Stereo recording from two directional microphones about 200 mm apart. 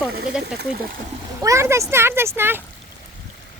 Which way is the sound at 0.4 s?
55° right (ahead or behind).